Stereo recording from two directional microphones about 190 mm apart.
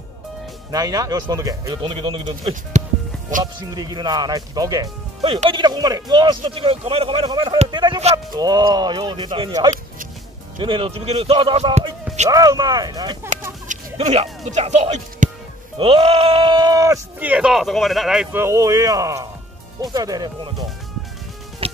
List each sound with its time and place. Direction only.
0.7 s speech: 20° right (ahead or behind)
8.0 s a man's voice: 35° right (ahead or behind)
8.4 s a man's voice: 20° right (ahead or behind)
12.3 s speech: 20° right (ahead or behind)
13.7 s speech: 35° right (ahead or behind); by 20.5 s 20° right (ahead or behind)